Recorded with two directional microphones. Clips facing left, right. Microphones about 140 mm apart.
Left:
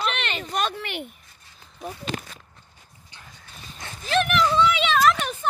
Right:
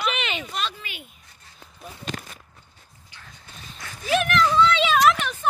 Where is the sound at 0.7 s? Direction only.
65° left (ahead or behind).